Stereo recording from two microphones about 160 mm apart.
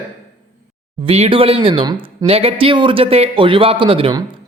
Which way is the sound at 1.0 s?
35° right (ahead or behind).